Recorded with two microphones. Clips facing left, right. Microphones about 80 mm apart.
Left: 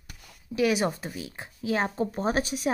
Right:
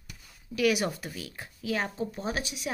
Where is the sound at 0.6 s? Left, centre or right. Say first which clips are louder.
Left 2 dB; left.